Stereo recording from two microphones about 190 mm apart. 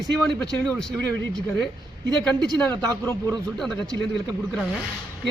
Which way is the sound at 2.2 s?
5° left (ahead or behind).